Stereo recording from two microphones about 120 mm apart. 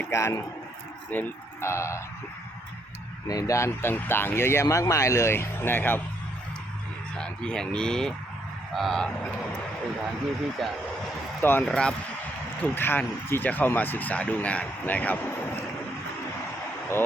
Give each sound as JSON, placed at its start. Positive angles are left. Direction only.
{"t": 0.0, "sound": "a man's voice", "side_deg": 25}
{"t": 3.2, "sound": "speech", "side_deg": 30}
{"t": 7.2, "sound": "speech", "side_deg": 5}
{"t": 10.6, "sound": "speech", "side_deg": 0}
{"t": 11.3, "sound": "speech", "side_deg": 20}
{"t": 11.6, "sound": "speech", "side_deg": 5}
{"t": 12.6, "sound": "speech", "side_deg": 15}